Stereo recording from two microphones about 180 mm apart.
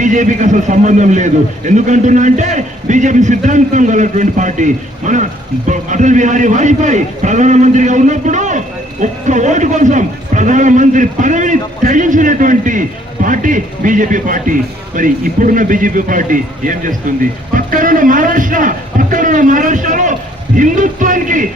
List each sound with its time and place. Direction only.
0.0 s a man's voice: 45° right (ahead or behind)